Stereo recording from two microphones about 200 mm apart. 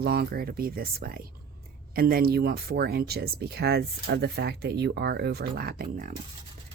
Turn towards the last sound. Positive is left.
turn(degrees=-45)  # may be behind; listen again after turning